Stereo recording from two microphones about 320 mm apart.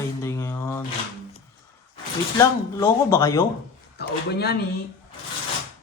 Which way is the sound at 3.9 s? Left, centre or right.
Left.